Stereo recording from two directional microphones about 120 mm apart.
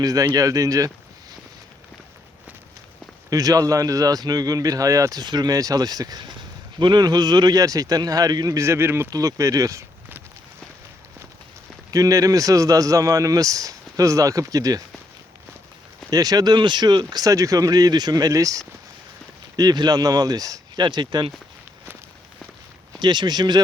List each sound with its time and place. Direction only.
0.0 s speech: 30° right (ahead or behind)
3.2 s speech: 30° right (ahead or behind)
11.9 s speech: 30° right (ahead or behind)
16.0 s speech: 30° right (ahead or behind)
23.0 s speech: 40° right (ahead or behind)